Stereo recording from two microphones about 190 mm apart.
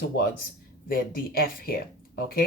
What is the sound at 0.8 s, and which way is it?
Speech, 50° left (ahead or behind).